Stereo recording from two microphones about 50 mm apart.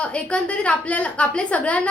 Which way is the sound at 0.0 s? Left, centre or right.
Left.